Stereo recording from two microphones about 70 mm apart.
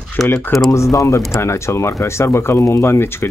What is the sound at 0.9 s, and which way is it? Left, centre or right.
Speech, left.